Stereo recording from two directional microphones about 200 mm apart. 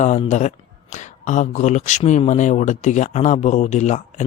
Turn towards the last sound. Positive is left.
turn(degrees=35)  # may be behind; listen again after turning